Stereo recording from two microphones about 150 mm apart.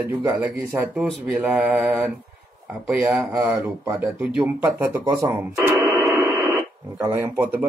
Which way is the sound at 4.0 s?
5° right (ahead or behind).